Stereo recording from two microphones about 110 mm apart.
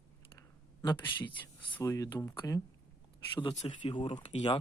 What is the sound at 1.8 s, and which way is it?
Speech, 25° left (ahead or behind).